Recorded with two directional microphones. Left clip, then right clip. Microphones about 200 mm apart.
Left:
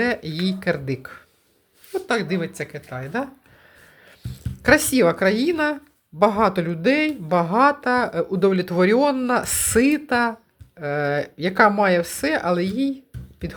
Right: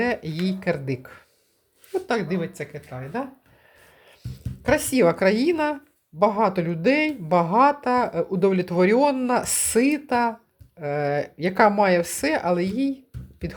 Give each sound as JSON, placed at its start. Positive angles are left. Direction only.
{"t": 0.0, "sound": "a woman's voice", "side_deg": 0}
{"t": 2.6, "sound": "speech", "side_deg": 15}
{"t": 4.6, "sound": "a woman's voice", "side_deg": 15}